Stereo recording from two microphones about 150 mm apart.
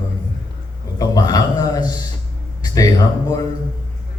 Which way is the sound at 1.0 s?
25° left (ahead or behind).